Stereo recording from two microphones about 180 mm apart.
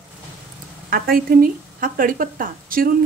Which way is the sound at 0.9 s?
55° right (ahead or behind).